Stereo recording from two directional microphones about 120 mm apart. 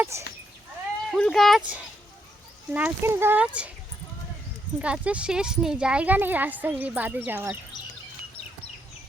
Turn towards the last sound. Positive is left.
turn(degrees=-15)  # may be behind; listen again after turning